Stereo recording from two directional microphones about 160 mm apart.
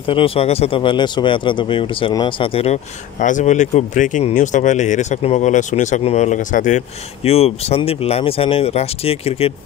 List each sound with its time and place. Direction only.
0.0 s speech: 35° left (ahead or behind); by 6.8 s 50° left (ahead or behind)
7.2 s speech: 40° left (ahead or behind)